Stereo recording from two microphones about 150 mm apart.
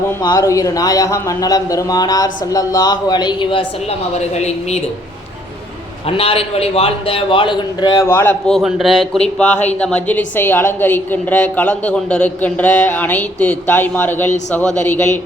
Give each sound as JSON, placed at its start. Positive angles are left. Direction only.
{"t": 0.0, "sound": "speech", "side_deg": 15}
{"t": 4.4, "sound": "speech", "side_deg": 45}
{"t": 6.1, "sound": "a man's voice", "side_deg": 40}
{"t": 8.0, "sound": "a woman's voice", "side_deg": 15}